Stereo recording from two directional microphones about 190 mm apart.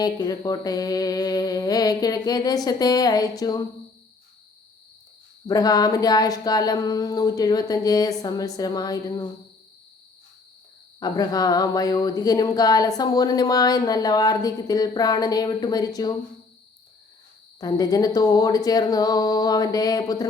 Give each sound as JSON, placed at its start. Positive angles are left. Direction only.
{"t": 0.0, "sound": "speech", "side_deg": 20}
{"t": 5.5, "sound": "speech", "side_deg": 20}
{"t": 11.0, "sound": "speech", "side_deg": 20}
{"t": 17.6, "sound": "speech", "side_deg": 20}